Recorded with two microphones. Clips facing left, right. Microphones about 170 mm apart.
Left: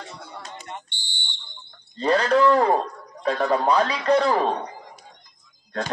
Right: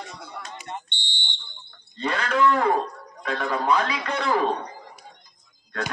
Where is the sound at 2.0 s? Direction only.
35° left (ahead or behind).